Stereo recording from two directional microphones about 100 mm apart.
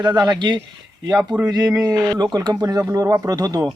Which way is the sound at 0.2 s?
45° right (ahead or behind).